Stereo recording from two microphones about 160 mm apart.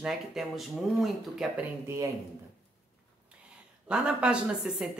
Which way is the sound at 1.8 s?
20° right (ahead or behind).